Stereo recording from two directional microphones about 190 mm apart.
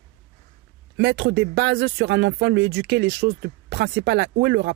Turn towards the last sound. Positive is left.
turn(degrees=-60)  # may be behind; listen again after turning